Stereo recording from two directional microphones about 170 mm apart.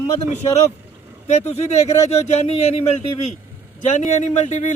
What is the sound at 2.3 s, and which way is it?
Speech, 40° left (ahead or behind).